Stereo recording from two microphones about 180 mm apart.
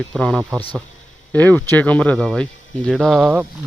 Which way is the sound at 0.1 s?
5° left (ahead or behind).